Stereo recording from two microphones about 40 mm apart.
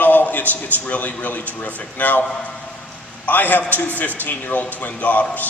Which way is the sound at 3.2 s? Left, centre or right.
Left.